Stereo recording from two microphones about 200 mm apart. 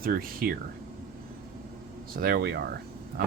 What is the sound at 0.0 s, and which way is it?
Speech, 45° right (ahead or behind).